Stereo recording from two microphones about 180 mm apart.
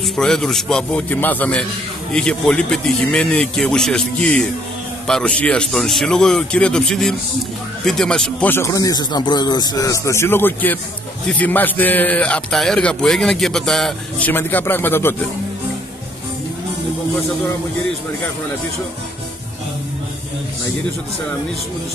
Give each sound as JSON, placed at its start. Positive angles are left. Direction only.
{"t": 0.0, "sound": "a man's voice", "side_deg": 0}